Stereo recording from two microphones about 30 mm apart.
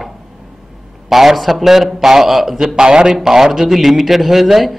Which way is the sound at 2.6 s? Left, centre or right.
Right.